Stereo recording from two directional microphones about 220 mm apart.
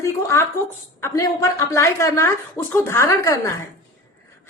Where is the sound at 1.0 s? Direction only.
15° left (ahead or behind).